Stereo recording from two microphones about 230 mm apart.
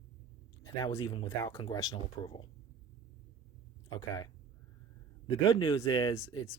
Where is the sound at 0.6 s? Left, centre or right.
Centre.